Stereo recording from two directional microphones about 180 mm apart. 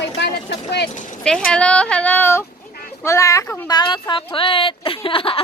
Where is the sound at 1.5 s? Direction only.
5° left (ahead or behind).